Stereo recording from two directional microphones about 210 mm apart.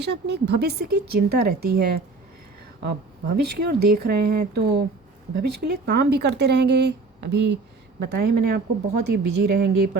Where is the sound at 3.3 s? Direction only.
50° right (ahead or behind).